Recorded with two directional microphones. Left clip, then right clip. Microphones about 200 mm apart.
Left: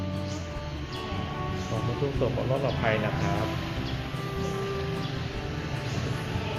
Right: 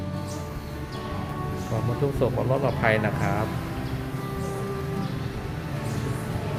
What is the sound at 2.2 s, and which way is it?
Speech, 20° right (ahead or behind).